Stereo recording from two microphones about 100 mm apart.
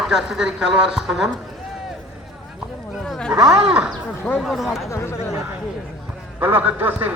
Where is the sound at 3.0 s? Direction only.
5° left (ahead or behind).